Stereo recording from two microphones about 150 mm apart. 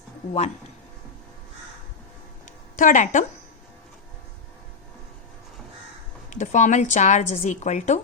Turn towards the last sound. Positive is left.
turn(degrees=50)  # may be behind; listen again after turning